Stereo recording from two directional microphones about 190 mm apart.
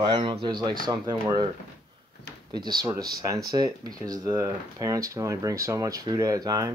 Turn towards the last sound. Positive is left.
turn(degrees=-20)  # may be behind; listen again after turning